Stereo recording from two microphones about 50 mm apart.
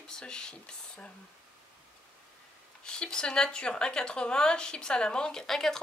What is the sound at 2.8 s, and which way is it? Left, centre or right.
Speech, centre.